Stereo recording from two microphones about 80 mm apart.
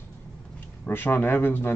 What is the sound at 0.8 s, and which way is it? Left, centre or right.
Speech, left.